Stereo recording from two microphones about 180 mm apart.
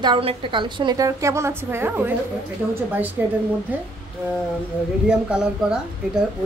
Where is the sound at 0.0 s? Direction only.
30° right (ahead or behind); by 3.1 s 10° right (ahead or behind).